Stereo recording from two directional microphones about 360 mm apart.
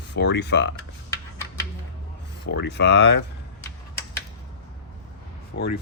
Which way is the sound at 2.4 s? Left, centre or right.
Left.